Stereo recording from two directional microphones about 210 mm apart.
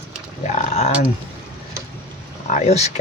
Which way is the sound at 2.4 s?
35° left (ahead or behind).